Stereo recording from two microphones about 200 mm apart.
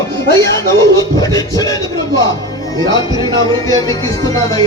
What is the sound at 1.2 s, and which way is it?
Speech, 20° left (ahead or behind).